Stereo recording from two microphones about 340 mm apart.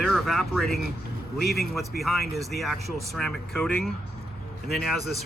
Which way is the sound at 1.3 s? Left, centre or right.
Left.